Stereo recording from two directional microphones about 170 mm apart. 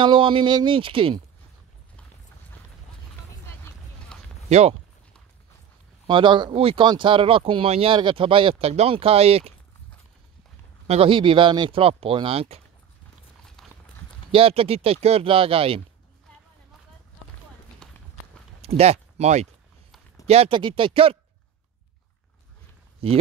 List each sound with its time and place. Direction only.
0.0 s speech: 30° right (ahead or behind)
4.1 s a sound: 5° left (ahead or behind)
4.5 s speech: 40° right (ahead or behind)
6.0 s speech: 30° right (ahead or behind)
10.9 s speech: 30° right (ahead or behind)
13.6 s clip-clop: centre (ahead or behind)
14.3 s speech: 35° right (ahead or behind)
17.8 s run: 5° left (ahead or behind)
18.6 s speech: 40° right (ahead or behind)
23.0 s speech: 35° right (ahead or behind)